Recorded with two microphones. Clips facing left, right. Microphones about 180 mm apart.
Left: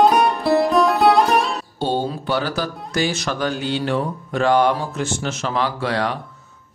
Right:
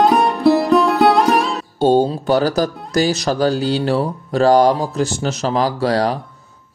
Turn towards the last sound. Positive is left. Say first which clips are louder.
# right 5 dB
turn(degrees=-35)  # may be behind; listen again after turning